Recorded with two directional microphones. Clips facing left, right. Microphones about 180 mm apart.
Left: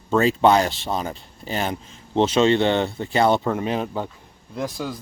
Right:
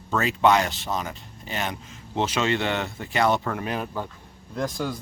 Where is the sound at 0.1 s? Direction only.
30° left (ahead or behind).